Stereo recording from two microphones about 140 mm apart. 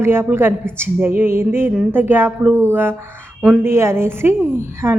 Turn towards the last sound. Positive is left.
turn(degrees=-15)  # may be behind; listen again after turning